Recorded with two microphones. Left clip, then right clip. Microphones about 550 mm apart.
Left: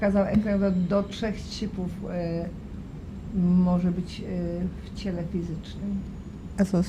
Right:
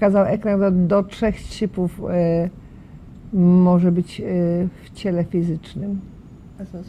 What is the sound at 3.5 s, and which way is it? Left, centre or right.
Speech, right.